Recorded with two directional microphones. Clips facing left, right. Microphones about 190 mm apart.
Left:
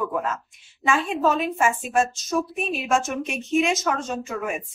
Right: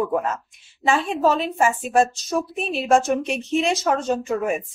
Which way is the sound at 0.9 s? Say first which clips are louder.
Right 2 dB; 35° right (ahead or behind).